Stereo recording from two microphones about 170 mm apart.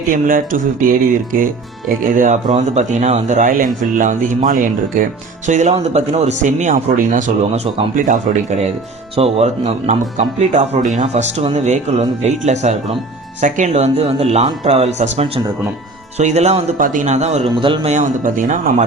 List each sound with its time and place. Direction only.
0.1 s speech: 55° right (ahead or behind)
2.0 s speech: 50° right (ahead or behind)
17.5 s a man's voice: 30° right (ahead or behind)
17.9 s speech: 50° right (ahead or behind)